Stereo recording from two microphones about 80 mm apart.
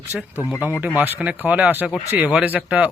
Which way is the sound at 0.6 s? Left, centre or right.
Centre.